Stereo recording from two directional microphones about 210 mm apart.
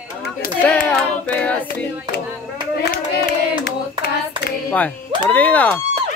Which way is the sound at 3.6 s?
50° left (ahead or behind).